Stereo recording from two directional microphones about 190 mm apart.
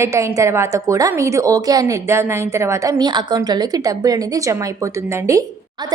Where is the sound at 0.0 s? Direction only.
15° right (ahead or behind).